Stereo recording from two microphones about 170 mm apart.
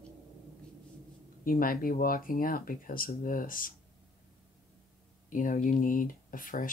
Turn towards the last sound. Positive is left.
turn(degrees=55)  # may be behind; listen again after turning